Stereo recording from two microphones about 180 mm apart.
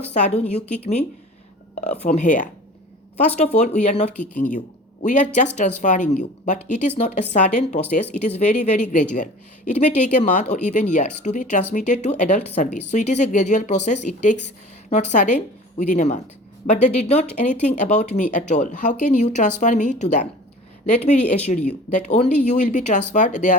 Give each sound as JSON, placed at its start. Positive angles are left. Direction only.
{"t": 0.1, "sound": "speech", "side_deg": 40}
{"t": 1.9, "sound": "speech", "side_deg": 35}
{"t": 4.4, "sound": "speech", "side_deg": 45}
{"t": 21.5, "sound": "speech", "side_deg": 40}